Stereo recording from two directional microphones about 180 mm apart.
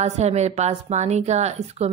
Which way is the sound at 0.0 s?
40° right (ahead or behind).